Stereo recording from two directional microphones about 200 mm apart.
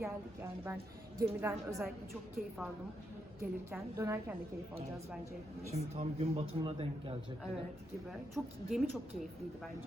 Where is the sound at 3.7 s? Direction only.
15° right (ahead or behind).